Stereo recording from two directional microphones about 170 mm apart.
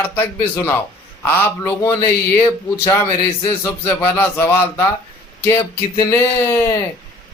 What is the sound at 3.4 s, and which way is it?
Speech, 15° left (ahead or behind).